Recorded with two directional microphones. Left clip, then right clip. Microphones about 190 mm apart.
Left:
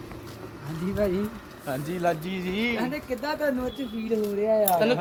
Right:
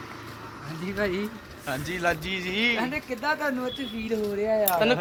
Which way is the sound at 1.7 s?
30° left (ahead or behind).